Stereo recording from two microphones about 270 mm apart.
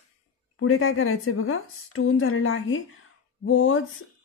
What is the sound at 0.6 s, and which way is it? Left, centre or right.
A woman's voice, left.